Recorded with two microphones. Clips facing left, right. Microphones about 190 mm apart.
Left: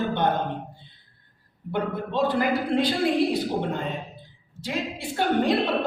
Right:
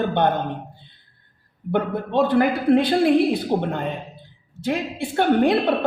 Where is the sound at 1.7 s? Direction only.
55° right (ahead or behind).